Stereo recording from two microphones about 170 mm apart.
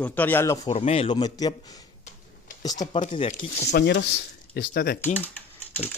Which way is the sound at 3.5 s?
80° left.